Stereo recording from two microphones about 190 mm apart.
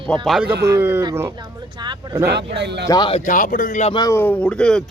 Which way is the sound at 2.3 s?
65° right (ahead or behind).